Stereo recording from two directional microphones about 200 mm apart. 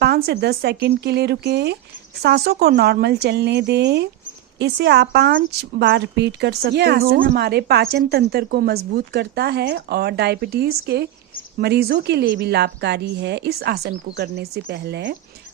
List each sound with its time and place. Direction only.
0.0 s speech: 55° right (ahead or behind)